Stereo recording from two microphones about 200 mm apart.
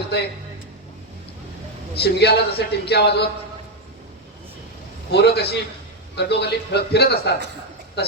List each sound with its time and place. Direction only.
2.0 s a man's voice: 55° left (ahead or behind)
5.1 s a man's voice: 55° left (ahead or behind)